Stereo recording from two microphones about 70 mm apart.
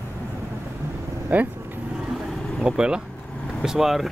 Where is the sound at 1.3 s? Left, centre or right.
Right.